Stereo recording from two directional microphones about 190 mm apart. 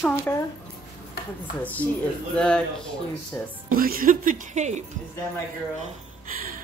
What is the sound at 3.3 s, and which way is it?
Speech, 10° left (ahead or behind).